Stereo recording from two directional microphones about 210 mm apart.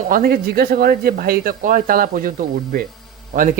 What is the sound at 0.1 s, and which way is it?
A man's voice, 45° right (ahead or behind).